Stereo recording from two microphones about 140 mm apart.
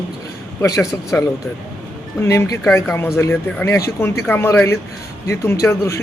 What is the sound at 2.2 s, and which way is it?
Speech, 25° left (ahead or behind).